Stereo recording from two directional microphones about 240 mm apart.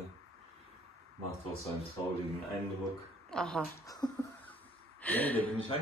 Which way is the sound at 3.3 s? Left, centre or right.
Centre.